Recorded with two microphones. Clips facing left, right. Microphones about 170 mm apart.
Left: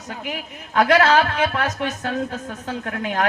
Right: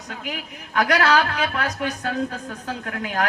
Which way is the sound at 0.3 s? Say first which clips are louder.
Left 2 dB; 25° left (ahead or behind).